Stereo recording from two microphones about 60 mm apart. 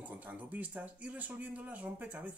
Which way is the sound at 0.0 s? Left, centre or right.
Right.